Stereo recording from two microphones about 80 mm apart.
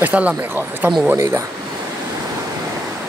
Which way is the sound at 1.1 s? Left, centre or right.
Right.